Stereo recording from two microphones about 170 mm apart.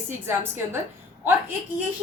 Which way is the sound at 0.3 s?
15° right (ahead or behind).